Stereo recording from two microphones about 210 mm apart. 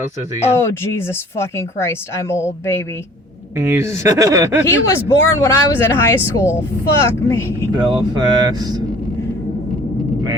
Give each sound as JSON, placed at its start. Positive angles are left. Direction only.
{"t": 0.4, "sound": "speech", "side_deg": 10}
{"t": 3.6, "sound": "speech", "side_deg": -10}
{"t": 4.6, "sound": "speech", "side_deg": 10}
{"t": 7.9, "sound": "speech", "side_deg": -20}